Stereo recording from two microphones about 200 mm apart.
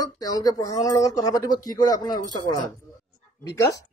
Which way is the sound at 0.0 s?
20° left (ahead or behind).